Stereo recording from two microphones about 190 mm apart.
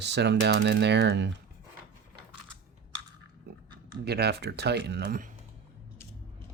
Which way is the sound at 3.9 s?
60° right (ahead or behind).